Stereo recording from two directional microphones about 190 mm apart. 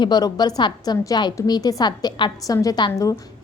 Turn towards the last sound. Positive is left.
turn(degrees=20)  # may be behind; listen again after turning